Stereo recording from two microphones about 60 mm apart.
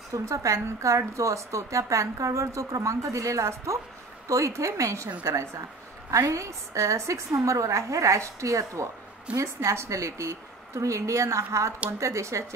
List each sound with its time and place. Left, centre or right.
0.1 s a woman's voice: right
6.0 s a woman's voice: right